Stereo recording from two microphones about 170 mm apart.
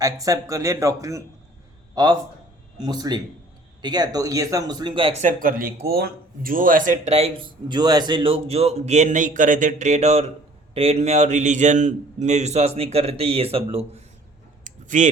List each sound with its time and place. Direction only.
0.0 s a man's voice: 20° right (ahead or behind)
5.2 s a man's voice: 55° right (ahead or behind); by 14.0 s 35° right (ahead or behind)
14.6 s a sound: 45° right (ahead or behind)